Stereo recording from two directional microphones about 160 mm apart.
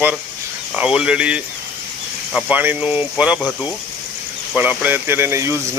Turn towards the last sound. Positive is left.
turn(degrees=-15)  # may be behind; listen again after turning